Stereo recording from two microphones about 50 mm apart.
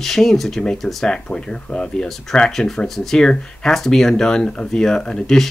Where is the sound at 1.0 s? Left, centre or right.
Centre.